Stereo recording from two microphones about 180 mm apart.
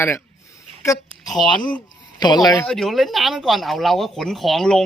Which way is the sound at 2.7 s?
Centre (ahead or behind).